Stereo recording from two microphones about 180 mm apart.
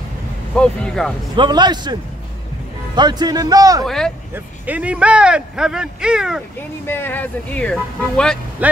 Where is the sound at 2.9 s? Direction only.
25° right (ahead or behind).